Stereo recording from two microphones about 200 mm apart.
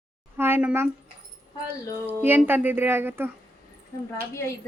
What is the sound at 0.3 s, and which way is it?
A woman's voice, 10° right (ahead or behind).